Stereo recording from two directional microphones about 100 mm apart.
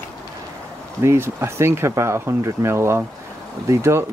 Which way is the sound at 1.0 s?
25° right (ahead or behind).